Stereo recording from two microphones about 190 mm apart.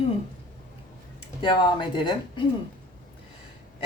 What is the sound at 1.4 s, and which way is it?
A woman's voice, 25° left (ahead or behind).